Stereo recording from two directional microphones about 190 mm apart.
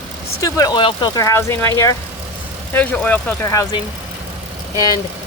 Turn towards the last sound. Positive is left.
turn(degrees=20)  # may be behind; listen again after turning